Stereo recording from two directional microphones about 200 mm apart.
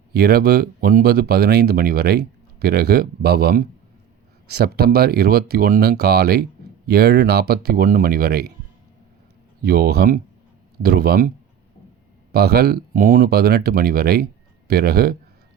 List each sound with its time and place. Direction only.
0.1 s speech: 50° right (ahead or behind)
9.6 s speech: 50° right (ahead or behind)
12.3 s speech: 50° right (ahead or behind)